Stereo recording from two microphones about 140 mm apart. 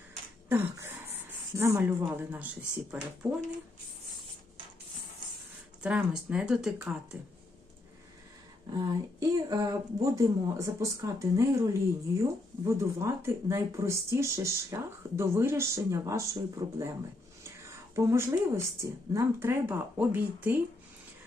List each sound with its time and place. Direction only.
0.4 s a sound: 15° right (ahead or behind)
1.5 s speech: 20° right (ahead or behind)
5.8 s speech: 5° right (ahead or behind)
8.7 s speech: 25° right (ahead or behind)
17.9 s speech: 20° right (ahead or behind)